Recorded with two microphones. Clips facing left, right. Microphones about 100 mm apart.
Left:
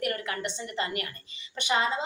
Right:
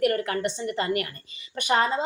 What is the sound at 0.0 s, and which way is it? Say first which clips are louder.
A woman's voice: right 7 dB; 40° right (ahead or behind).